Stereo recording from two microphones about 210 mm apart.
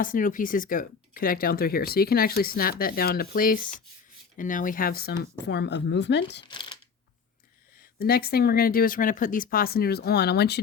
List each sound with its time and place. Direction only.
0.0 s speech: 40° left (ahead or behind)
6.5 s a sound: 20° left (ahead or behind)
7.9 s speech: 45° left (ahead or behind)